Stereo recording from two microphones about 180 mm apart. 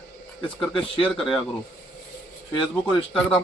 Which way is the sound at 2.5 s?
25° left (ahead or behind).